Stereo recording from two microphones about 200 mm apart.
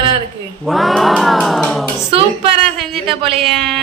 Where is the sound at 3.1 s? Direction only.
25° right (ahead or behind).